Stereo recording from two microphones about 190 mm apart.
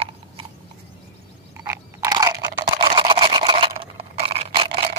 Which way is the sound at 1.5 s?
15° right (ahead or behind).